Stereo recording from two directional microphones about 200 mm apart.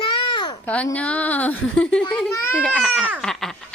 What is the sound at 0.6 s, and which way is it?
A child's voice, 5° left (ahead or behind).